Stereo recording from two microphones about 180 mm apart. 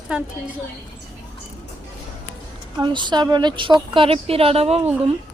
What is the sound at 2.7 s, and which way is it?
A woman's voice, 25° right (ahead or behind).